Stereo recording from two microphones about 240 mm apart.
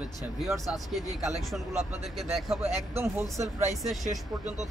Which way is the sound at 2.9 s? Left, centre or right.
Centre.